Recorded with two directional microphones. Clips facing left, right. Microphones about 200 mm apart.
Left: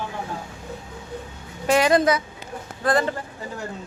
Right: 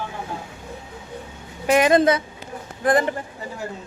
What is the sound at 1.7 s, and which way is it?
A woman's voice, 20° right (ahead or behind).